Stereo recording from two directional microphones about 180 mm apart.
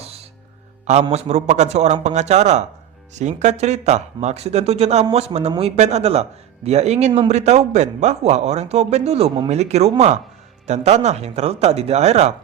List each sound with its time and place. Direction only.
0.0 s music: 35° right (ahead or behind)
1.1 s a man's voice: 40° right (ahead or behind)